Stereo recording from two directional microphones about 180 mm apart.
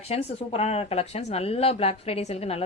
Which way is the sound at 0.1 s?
35° left (ahead or behind).